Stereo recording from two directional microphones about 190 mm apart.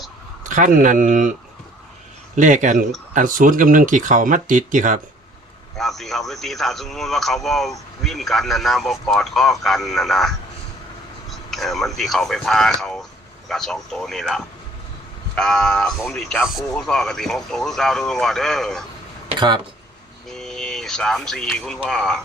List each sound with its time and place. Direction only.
0.4 s speech: 45° right (ahead or behind)
2.3 s speech: 40° right (ahead or behind)
5.7 s a man's voice: centre (ahead or behind)
19.3 s speech: 25° right (ahead or behind)
20.3 s a man's voice: 5° left (ahead or behind)